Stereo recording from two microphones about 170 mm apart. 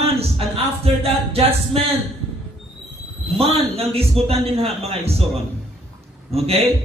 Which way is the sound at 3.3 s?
35° right (ahead or behind).